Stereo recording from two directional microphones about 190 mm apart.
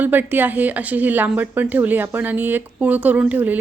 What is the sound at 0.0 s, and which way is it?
A woman's voice, 10° right (ahead or behind).